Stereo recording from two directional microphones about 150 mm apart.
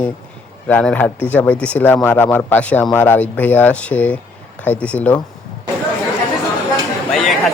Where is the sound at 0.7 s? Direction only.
10° left (ahead or behind).